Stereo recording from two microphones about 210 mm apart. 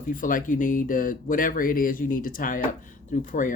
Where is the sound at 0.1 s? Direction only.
40° left (ahead or behind).